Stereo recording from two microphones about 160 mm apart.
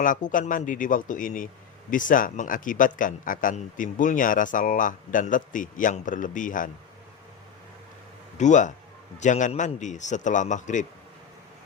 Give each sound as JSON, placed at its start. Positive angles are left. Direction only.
{"t": 0.0, "sound": "speech", "side_deg": 55}
{"t": 8.4, "sound": "a man's voice", "side_deg": 50}